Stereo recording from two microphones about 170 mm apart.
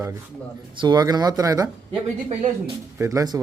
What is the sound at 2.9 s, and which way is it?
Speech, 20° right (ahead or behind).